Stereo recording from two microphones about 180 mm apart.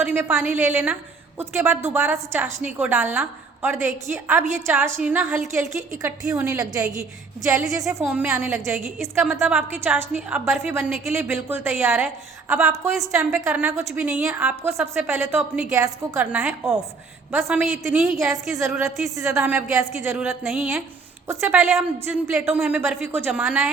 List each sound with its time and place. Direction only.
0.0 s a woman's voice: 10° right (ahead or behind)
7.7 s a woman's voice: 15° right (ahead or behind)
9.2 s a woman's voice: 5° right (ahead or behind)
20.1 s speech: 5° right (ahead or behind)
21.2 s a woman's voice: 15° right (ahead or behind)